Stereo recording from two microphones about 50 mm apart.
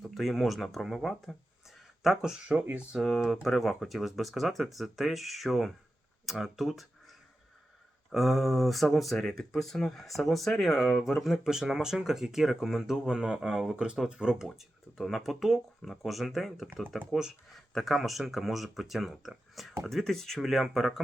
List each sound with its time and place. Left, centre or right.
0.0 s speech: centre
2.5 s speech: right
3.4 s speech: centre
8.1 s speech: centre
14.4 s speech: centre
17.5 s speech: centre